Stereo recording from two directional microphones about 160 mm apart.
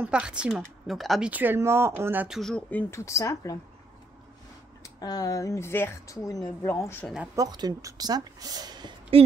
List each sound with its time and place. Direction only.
0.0 s a woman's voice: 5° right (ahead or behind)
2.9 s speech: 20° left (ahead or behind)
4.8 s speech: 20° left (ahead or behind)
7.3 s a woman's voice: 25° right (ahead or behind)